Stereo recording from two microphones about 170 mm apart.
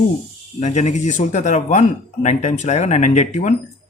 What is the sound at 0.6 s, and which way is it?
Speech, 45° left (ahead or behind).